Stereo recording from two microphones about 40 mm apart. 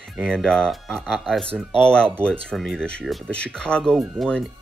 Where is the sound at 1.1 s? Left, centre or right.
Centre.